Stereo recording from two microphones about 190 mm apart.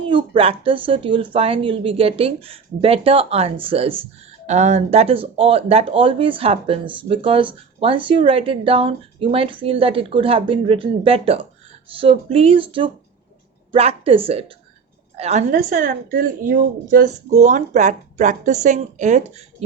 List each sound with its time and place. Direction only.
0.0 s speech: 25° right (ahead or behind)
15.5 s speech: 50° right (ahead or behind)